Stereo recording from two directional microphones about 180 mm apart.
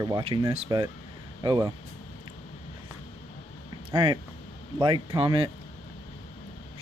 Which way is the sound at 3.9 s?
25° right (ahead or behind).